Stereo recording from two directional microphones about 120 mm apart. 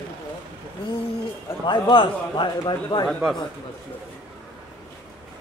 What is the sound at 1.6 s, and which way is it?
A man's voice, 40° left (ahead or behind).